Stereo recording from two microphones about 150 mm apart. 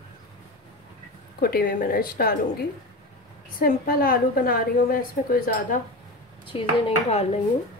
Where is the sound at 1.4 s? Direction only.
80° left.